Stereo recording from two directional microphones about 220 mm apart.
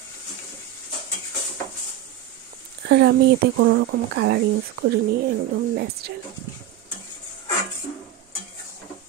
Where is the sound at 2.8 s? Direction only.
50° right (ahead or behind).